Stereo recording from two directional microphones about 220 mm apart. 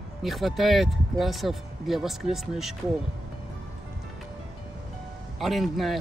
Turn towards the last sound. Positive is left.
turn(degrees=0)  # may be behind; listen again after turning